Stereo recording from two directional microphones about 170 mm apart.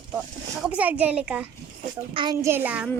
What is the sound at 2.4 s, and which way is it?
Speech, 10° right (ahead or behind).